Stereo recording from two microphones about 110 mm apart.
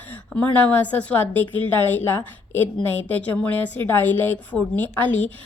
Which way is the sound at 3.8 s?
20° left (ahead or behind).